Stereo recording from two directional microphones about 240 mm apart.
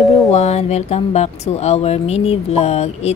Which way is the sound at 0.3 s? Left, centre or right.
Left.